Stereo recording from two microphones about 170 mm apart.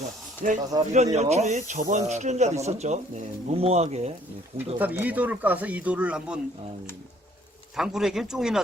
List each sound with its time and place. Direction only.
0.4 s speech: 50° right (ahead or behind)
4.5 s speech: 10° right (ahead or behind)
7.8 s speech: centre (ahead or behind)